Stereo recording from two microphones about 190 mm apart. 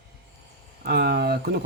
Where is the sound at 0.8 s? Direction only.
60° right (ahead or behind).